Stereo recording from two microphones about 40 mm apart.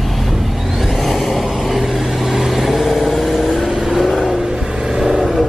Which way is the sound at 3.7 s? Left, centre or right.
Centre.